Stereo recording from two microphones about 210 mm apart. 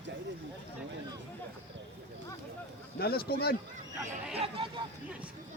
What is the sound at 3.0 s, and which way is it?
Speech, 45° left (ahead or behind).